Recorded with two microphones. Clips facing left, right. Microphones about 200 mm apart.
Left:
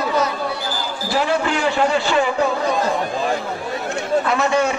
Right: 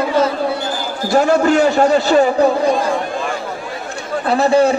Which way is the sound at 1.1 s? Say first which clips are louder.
Right 7 dB; 45° right (ahead or behind).